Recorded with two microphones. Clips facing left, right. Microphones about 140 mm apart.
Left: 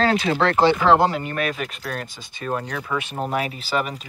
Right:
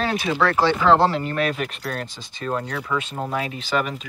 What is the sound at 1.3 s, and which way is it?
Speech, 35° right (ahead or behind).